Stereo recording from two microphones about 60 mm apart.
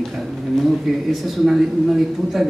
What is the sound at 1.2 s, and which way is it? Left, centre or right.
Speech, centre.